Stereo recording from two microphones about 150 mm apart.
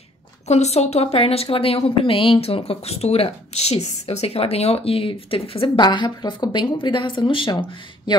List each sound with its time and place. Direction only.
0.5 s speech: 45° left (ahead or behind); by 8.2 s 30° left (ahead or behind)